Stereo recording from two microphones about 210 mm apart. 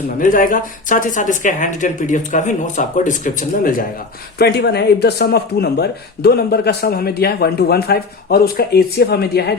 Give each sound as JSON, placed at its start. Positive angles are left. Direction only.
{"t": 0.2, "sound": "speech", "side_deg": 40}